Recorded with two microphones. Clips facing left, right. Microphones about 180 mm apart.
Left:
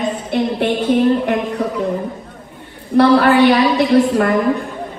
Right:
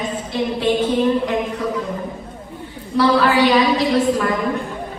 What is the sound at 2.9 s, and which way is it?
Speech, 60° left (ahead or behind).